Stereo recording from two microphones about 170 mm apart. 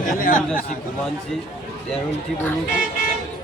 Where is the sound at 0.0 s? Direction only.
50° left (ahead or behind).